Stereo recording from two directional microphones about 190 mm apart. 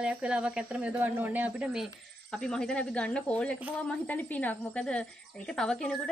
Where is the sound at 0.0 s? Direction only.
5° right (ahead or behind).